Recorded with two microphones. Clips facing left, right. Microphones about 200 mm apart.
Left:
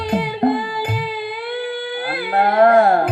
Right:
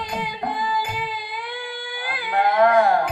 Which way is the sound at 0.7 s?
40° left (ahead or behind).